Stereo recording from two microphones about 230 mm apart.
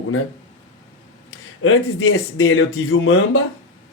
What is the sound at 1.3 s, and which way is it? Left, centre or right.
Speech, left.